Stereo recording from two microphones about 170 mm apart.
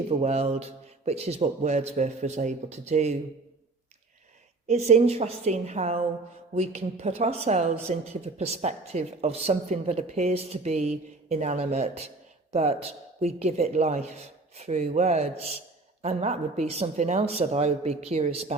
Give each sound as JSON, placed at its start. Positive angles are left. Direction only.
{"t": 0.1, "sound": "a woman's voice", "side_deg": -40}
{"t": 4.7, "sound": "a woman's voice", "side_deg": -40}